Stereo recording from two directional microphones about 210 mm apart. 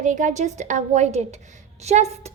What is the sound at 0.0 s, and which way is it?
A woman's voice, 35° right (ahead or behind).